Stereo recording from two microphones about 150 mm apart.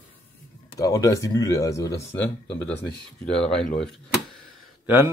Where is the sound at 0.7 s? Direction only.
25° left (ahead or behind); by 4.0 s 5° left (ahead or behind).